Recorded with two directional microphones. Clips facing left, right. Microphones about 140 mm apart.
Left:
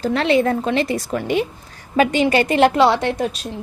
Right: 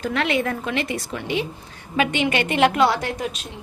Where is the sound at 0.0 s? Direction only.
35° left (ahead or behind).